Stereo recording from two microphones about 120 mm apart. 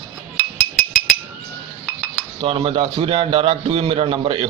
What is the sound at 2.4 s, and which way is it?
A man's voice, 50° right (ahead or behind).